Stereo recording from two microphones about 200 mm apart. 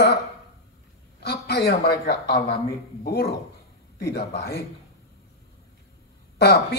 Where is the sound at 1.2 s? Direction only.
55° left (ahead or behind).